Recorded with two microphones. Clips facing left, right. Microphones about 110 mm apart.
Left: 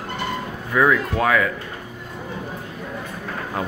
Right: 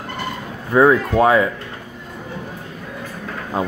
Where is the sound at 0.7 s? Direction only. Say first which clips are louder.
Right 5 dB; 30° right (ahead or behind).